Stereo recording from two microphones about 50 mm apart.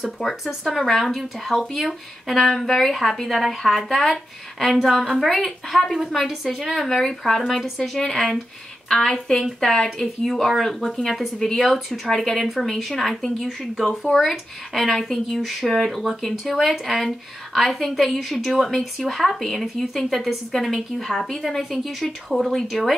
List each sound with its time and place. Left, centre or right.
0.2 s speech: centre
0.7 s a woman's voice: centre